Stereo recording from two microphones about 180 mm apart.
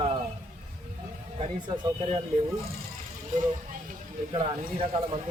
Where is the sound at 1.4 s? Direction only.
35° right (ahead or behind).